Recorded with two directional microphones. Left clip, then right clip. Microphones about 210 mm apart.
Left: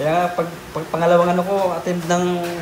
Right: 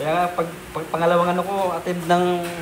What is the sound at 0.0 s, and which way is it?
A man's voice, 15° left (ahead or behind).